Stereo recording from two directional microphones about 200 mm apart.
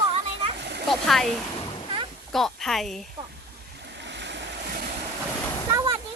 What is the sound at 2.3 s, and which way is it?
Speech, centre (ahead or behind).